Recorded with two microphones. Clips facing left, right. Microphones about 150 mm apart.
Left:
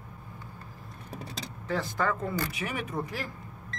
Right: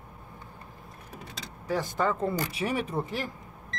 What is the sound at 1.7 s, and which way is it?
Speech, 20° right (ahead or behind).